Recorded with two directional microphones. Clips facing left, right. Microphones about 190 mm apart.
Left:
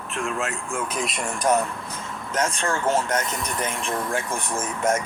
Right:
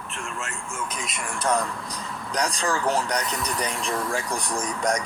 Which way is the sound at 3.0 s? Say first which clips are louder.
Left 1 dB; 5° left (ahead or behind).